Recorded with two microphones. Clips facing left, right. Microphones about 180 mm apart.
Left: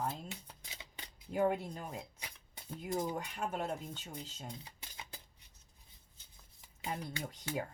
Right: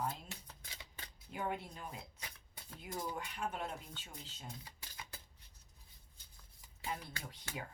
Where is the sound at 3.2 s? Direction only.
45° left (ahead or behind).